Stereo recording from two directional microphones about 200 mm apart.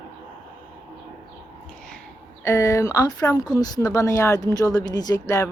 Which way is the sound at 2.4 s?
15° left (ahead or behind).